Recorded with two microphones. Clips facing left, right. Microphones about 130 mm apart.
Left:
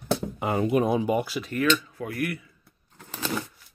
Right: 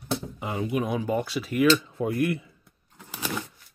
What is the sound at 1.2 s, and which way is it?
Speech, centre (ahead or behind).